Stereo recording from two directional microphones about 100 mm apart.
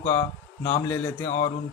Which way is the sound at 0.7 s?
25° left (ahead or behind).